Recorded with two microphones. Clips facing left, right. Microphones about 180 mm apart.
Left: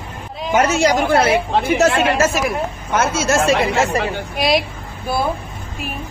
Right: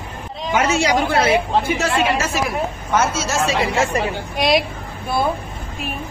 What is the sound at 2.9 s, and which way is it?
Speech, 60° left (ahead or behind).